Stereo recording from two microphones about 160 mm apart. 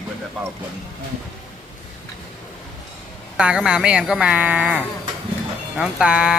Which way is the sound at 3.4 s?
5° right (ahead or behind).